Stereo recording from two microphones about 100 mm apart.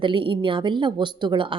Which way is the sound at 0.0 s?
55° right (ahead or behind).